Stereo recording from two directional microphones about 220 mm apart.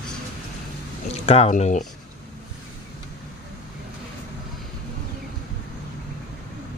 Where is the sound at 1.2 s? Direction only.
30° left (ahead or behind).